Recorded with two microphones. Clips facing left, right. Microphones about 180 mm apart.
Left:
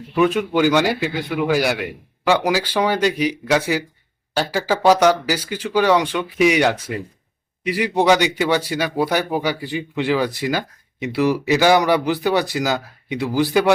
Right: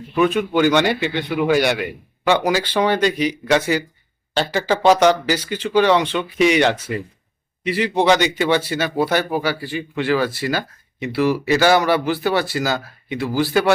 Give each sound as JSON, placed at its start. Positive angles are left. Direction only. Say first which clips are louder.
{"t": 0.2, "sound": "speech", "louder": "even", "side_deg": 10}